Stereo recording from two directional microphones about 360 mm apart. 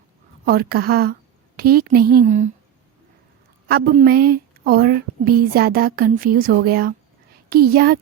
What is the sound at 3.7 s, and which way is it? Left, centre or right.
A woman's voice, right.